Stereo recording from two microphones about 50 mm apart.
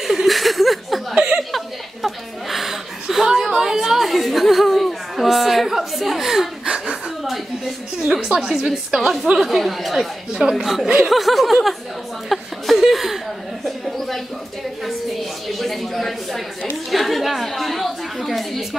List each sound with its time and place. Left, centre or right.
0.0 s speech: centre
1.1 s chuckle: centre
2.0 s a sound: centre
6.6 s chuckle: centre
8.3 s a woman's voice: centre
9.4 s speech: centre
9.9 s a woman's voice: centre
12.3 s chuckle: centre
13.7 s a sound: centre